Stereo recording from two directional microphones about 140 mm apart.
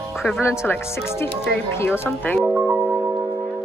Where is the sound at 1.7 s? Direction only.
15° left (ahead or behind).